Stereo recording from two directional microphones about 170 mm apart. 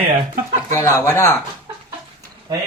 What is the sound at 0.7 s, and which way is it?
Speech, 20° left (ahead or behind).